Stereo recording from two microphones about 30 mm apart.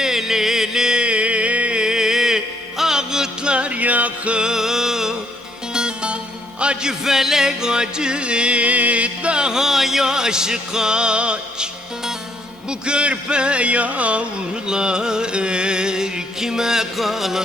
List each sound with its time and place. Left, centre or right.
0.0 s a sound: centre
1.0 s a sound: right
1.8 s music: right
3.4 s music: right
3.8 s music: right
4.4 s music: centre
5.7 s music: right
6.8 s music: centre; by 9.3 s right
9.3 s music: right
9.6 s music: centre; by 11.7 s right
12.8 s music: right
14.7 s music: right
17.0 s music: centre